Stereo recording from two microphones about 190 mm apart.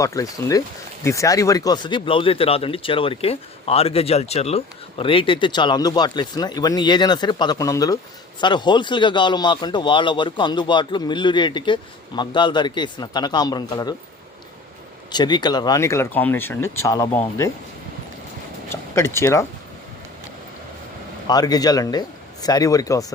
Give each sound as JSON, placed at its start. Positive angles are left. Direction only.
{"t": 0.0, "sound": "speech", "side_deg": 15}
{"t": 15.1, "sound": "speech", "side_deg": 25}
{"t": 18.7, "sound": "speech", "side_deg": 15}
{"t": 21.2, "sound": "speech", "side_deg": 20}